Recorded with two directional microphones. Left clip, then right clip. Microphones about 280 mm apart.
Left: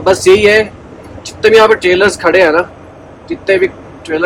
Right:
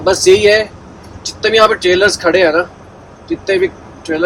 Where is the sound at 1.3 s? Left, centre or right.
Left.